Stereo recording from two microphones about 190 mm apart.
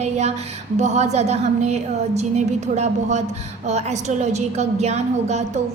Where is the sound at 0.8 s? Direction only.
35° right (ahead or behind).